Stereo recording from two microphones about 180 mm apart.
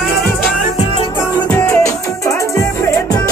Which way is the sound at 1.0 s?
25° left (ahead or behind).